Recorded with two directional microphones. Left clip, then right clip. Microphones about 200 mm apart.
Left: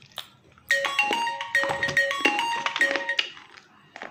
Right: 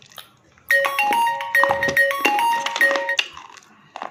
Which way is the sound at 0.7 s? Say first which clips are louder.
Right 6 dB; 45° right (ahead or behind).